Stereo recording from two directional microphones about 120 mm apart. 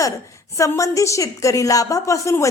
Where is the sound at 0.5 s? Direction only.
25° left (ahead or behind).